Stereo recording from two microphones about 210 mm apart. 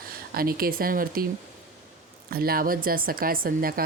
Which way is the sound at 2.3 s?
45° right (ahead or behind).